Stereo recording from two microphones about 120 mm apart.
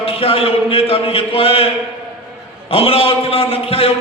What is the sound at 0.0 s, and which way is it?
A man's voice, 50° left (ahead or behind).